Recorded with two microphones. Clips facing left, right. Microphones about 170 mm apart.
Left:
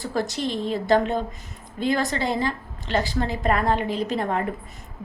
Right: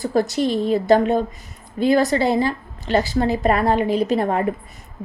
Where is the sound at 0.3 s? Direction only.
10° right (ahead or behind).